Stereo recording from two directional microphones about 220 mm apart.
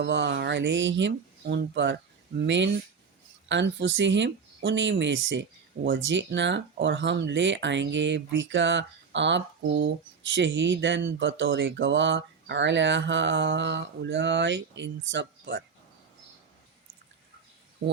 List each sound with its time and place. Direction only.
0.0 s speech: 50° right (ahead or behind)